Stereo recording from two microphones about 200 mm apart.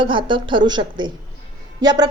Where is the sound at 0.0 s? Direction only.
25° right (ahead or behind).